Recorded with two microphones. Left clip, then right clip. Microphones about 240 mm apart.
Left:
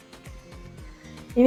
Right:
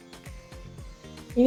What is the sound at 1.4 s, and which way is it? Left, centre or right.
Speech, left.